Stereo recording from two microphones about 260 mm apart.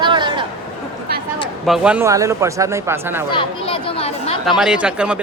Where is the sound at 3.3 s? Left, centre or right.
Centre.